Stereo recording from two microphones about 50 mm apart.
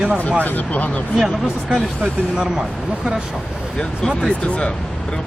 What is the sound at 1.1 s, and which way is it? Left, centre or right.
Speech, centre.